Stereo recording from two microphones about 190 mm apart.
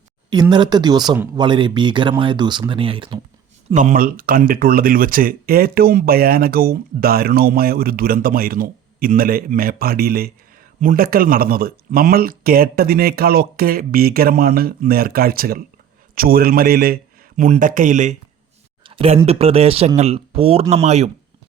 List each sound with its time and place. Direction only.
0.5 s speech: 25° right (ahead or behind)
3.7 s speech: 40° right (ahead or behind)
18.8 s speech: 30° right (ahead or behind)